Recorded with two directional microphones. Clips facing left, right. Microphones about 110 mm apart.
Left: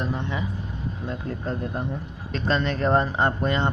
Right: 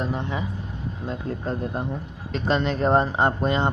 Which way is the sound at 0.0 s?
15° right (ahead or behind).